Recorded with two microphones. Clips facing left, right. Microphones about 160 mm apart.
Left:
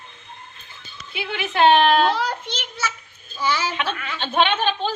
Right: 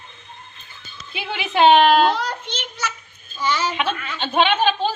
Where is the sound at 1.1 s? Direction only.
20° right (ahead or behind).